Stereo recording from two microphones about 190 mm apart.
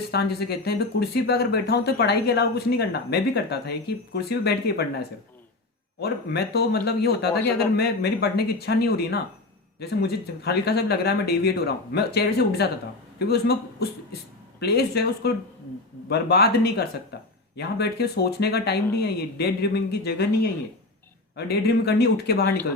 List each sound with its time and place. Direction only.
0.1 s speech: 60° left (ahead or behind)